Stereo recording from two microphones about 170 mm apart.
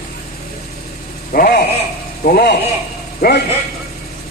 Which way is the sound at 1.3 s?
60° left (ahead or behind).